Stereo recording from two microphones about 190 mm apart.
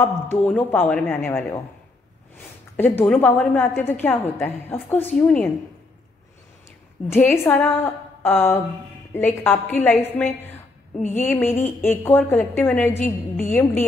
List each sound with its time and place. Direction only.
0.0 s a woman's voice: 10° left (ahead or behind)
7.1 s a woman's voice: 10° left (ahead or behind)
11.0 s a woman's voice: 40° left (ahead or behind)
11.2 s a woman's voice: 10° left (ahead or behind)
13.0 s a woman's voice: 40° left (ahead or behind)